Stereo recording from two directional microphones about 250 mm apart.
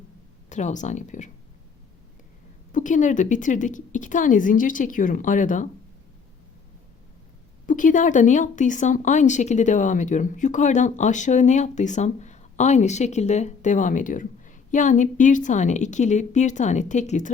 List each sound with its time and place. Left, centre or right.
0.5 s speech: left
2.7 s a woman's voice: left
7.7 s speech: left